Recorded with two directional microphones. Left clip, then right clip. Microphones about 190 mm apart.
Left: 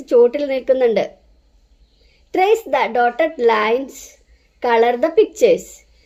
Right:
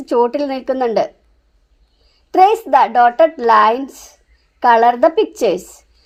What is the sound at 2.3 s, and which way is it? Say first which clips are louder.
A child's voice: right 5 dB; 15° right (ahead or behind).